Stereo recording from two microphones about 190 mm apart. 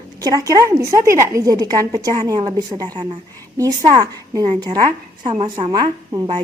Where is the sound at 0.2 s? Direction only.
20° right (ahead or behind).